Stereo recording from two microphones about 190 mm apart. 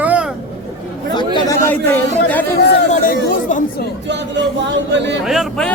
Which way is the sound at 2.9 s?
45° left (ahead or behind).